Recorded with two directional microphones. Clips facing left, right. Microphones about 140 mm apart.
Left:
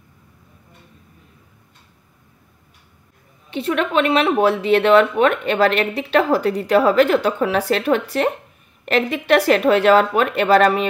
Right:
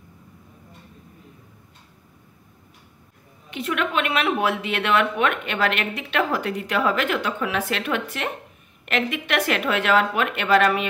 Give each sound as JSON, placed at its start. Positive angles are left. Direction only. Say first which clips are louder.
{"t": 3.4, "sound": "a woman's voice", "louder": "left 5 dB", "side_deg": 30}